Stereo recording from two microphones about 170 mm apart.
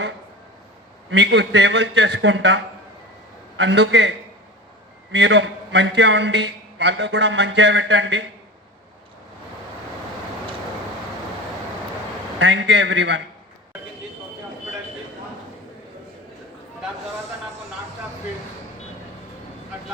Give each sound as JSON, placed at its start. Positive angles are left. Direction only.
{"t": 1.1, "sound": "a man's voice", "side_deg": -90}
{"t": 3.6, "sound": "a man's voice", "side_deg": -90}
{"t": 5.1, "sound": "a man's voice", "side_deg": -90}
{"t": 12.4, "sound": "a man's voice", "side_deg": -90}